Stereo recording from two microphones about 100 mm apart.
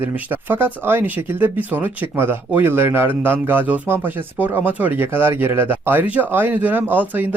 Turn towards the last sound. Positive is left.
turn(degrees=-15)  # may be behind; listen again after turning